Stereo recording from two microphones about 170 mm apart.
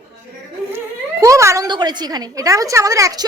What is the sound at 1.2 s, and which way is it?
A woman's voice, 15° right (ahead or behind).